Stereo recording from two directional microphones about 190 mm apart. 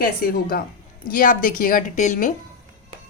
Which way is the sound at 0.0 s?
50° left (ahead or behind).